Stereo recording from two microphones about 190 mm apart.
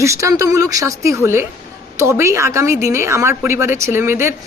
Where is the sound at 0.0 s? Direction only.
15° right (ahead or behind).